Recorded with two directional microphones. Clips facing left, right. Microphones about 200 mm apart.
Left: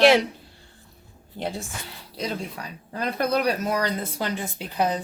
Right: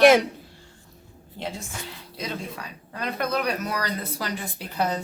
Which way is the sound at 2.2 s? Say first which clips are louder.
Left 3 dB; 30° left (ahead or behind).